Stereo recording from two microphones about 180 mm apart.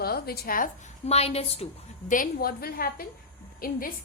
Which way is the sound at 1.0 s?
35° left (ahead or behind).